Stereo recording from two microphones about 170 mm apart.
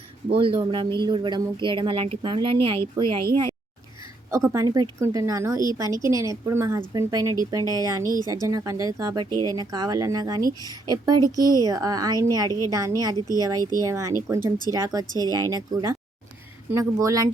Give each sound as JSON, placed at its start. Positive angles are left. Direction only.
{"t": 0.3, "sound": "a woman's voice", "side_deg": -30}
{"t": 4.3, "sound": "a woman's voice", "side_deg": -20}